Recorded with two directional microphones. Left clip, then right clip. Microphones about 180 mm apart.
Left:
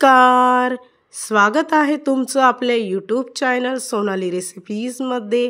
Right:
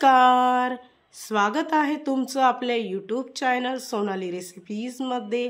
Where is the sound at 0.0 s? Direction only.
30° left (ahead or behind).